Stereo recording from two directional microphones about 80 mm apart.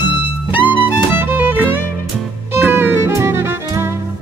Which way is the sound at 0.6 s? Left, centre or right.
Right.